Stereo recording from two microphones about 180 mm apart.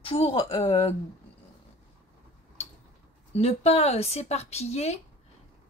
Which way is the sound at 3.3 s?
35° left (ahead or behind).